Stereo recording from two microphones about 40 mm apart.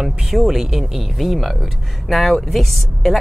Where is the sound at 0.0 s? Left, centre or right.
Centre.